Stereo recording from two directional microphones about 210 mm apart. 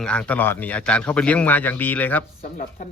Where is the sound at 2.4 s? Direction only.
40° left (ahead or behind).